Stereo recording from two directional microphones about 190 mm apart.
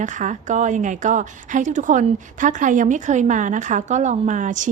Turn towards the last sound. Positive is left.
turn(degrees=-40)  # may be behind; listen again after turning